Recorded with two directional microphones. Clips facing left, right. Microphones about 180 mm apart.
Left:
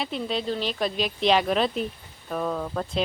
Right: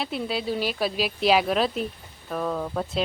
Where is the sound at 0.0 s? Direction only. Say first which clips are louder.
Even; 5° right (ahead or behind).